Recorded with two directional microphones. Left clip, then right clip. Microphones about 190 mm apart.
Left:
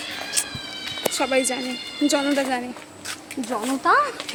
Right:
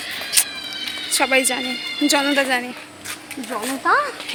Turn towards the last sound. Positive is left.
turn(degrees=35)  # may be behind; listen again after turning